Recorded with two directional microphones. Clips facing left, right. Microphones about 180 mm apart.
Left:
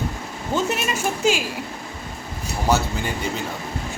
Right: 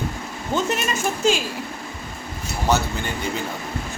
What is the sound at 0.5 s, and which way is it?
Speech, 10° left (ahead or behind).